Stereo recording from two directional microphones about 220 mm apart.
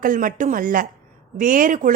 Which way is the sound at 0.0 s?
35° right (ahead or behind).